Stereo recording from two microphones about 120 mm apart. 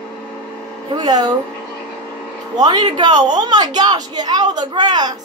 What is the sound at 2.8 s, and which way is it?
A woman's voice, 40° right (ahead or behind).